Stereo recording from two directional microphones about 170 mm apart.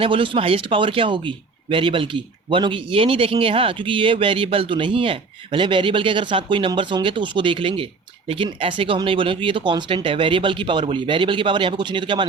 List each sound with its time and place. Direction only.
0.0 s speech: 30° right (ahead or behind)